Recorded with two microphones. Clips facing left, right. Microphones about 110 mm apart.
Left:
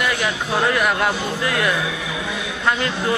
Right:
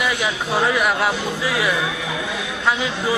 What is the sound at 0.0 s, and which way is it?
A man's voice, 5° right (ahead or behind).